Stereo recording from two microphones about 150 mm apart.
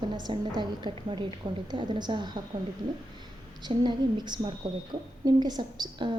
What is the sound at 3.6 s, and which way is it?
A woman's voice, 30° right (ahead or behind).